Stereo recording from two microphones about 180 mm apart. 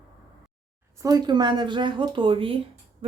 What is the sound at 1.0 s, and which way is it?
A woman's voice, 20° right (ahead or behind).